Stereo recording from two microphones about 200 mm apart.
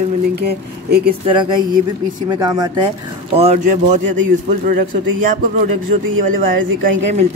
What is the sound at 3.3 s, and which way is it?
Speech, 35° right (ahead or behind).